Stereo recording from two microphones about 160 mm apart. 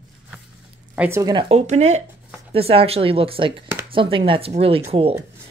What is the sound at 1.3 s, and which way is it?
Speech, 40° right (ahead or behind).